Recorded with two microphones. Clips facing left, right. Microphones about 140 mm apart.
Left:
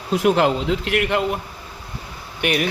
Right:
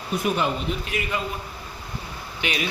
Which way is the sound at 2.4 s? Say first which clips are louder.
Left 7 dB; 55° left (ahead or behind).